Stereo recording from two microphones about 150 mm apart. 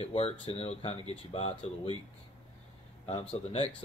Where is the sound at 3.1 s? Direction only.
35° left (ahead or behind).